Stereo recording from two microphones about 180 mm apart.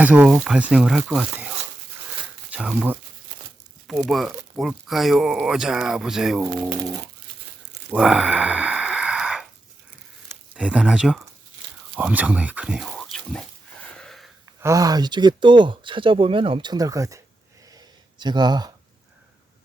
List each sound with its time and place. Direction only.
0.0 s speech: 10° right (ahead or behind)
2.5 s speech: 10° right (ahead or behind)
7.9 s sigh: 5° right (ahead or behind)
10.5 s speech: 5° right (ahead or behind)
13.9 s a sound: 5° left (ahead or behind)
14.6 s speech: 20° right (ahead or behind)
17.7 s a sound: 20° right (ahead or behind)